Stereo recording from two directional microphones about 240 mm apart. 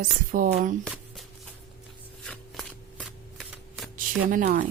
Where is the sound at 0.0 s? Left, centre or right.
Right.